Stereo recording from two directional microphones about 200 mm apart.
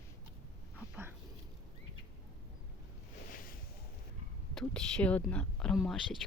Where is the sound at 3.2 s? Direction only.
45° left (ahead or behind).